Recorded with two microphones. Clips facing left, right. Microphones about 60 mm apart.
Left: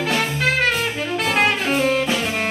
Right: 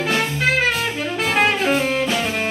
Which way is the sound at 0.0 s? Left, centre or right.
Centre.